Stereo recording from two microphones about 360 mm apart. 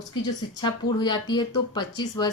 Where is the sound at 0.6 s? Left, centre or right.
Centre.